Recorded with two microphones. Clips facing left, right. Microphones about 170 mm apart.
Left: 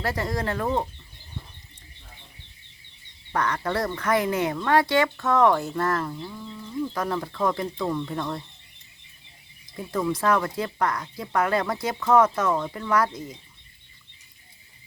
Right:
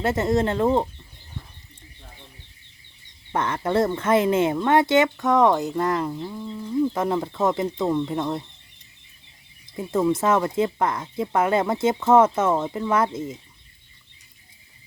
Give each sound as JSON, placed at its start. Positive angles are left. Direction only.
{"t": 0.0, "sound": "speech", "side_deg": -25}
{"t": 3.3, "sound": "speech", "side_deg": -25}
{"t": 9.7, "sound": "speech", "side_deg": -25}